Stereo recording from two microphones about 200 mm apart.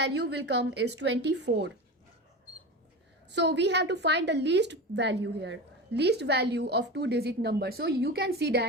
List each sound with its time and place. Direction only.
0.0 s a woman's voice: 60° right (ahead or behind)
3.2 s a woman's voice: 60° right (ahead or behind)